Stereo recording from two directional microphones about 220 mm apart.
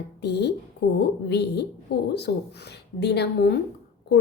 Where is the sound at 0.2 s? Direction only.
50° left (ahead or behind).